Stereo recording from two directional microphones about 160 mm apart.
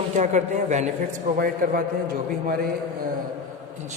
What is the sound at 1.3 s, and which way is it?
Speech, 65° right (ahead or behind).